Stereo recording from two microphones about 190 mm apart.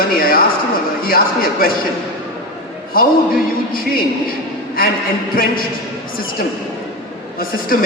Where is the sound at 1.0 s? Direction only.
50° left (ahead or behind).